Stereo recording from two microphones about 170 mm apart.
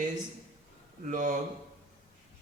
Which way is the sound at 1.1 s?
50° right (ahead or behind).